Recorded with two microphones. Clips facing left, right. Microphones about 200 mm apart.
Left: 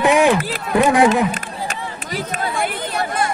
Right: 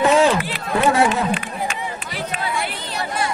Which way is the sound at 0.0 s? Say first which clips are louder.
Left 1 dB; 15° left (ahead or behind).